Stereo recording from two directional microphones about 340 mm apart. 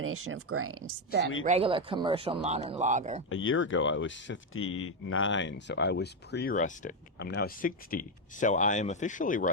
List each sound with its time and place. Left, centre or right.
0.0 s speech: right
1.5 s speech: centre
3.2 s speech: left